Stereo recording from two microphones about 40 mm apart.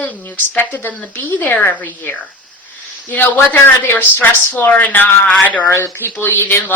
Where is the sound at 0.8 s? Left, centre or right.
Left.